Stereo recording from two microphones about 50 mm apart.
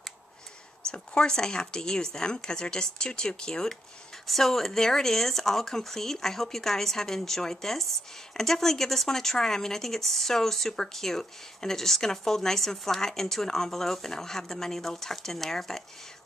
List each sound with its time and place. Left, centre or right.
0.9 s speech: centre
4.3 s speech: centre